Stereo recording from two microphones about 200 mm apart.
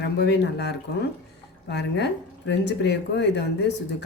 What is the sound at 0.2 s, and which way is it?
Speech, 60° left (ahead or behind).